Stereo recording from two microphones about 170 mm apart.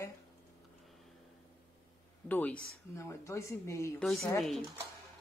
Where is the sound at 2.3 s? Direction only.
10° left (ahead or behind).